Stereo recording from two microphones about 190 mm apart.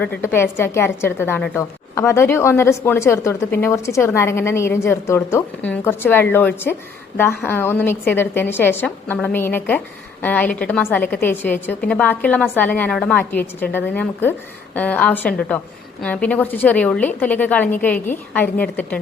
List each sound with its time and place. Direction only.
0.3 s a woman's voice: 10° left (ahead or behind)